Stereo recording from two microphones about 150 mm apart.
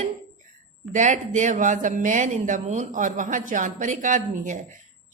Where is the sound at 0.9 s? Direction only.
55° right (ahead or behind).